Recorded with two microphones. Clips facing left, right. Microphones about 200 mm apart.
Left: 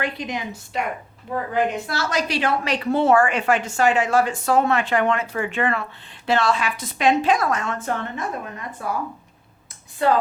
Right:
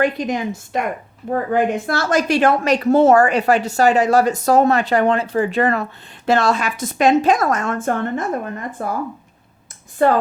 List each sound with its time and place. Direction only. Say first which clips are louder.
0.0 s a woman's voice: right 8 dB; 45° right (ahead or behind)
10.0 s a woman's voice: right 4 dB; 50° right (ahead or behind)